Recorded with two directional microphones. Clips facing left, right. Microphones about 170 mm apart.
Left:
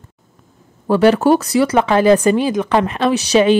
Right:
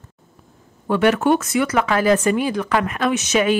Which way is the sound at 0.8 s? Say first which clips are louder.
Left 5 dB; 35° left (ahead or behind).